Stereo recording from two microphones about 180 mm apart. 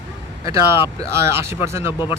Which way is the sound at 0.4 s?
15° right (ahead or behind).